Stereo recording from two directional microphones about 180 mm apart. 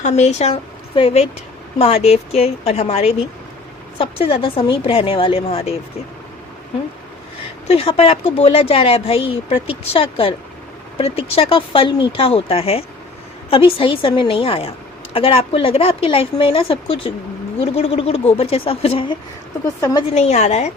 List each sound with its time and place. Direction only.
0.0 s speech: 40° left (ahead or behind)
7.7 s a woman's voice: 35° left (ahead or behind)
20.1 s speech: 35° left (ahead or behind)